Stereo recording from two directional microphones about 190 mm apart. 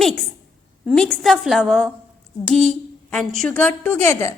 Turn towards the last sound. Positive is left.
turn(degrees=15)  # may be behind; listen again after turning